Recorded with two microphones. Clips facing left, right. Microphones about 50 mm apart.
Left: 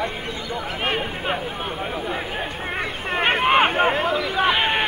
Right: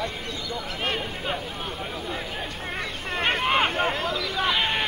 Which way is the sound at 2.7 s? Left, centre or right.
Left.